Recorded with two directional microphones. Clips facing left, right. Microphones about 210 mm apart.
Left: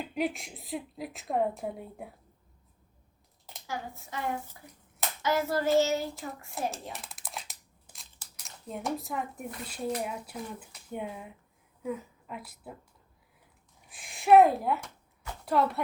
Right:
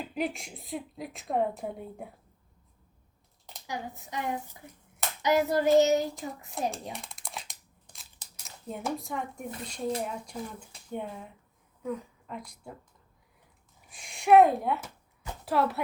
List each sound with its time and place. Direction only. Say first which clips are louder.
0.1 s a woman's voice: left 2 dB; centre (ahead or behind)
3.7 s child singing: right 1 dB; 15° right (ahead or behind)
6.5 s a woman's voice: right 2 dB; centre (ahead or behind)
6.9 s crumpling: right 1 dB; 5° left (ahead or behind)
8.4 s a woman's voice: even; centre (ahead or behind)
13.9 s a woman's voice: even; centre (ahead or behind)